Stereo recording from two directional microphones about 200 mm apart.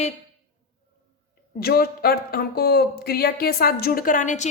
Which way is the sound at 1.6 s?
50° left (ahead or behind).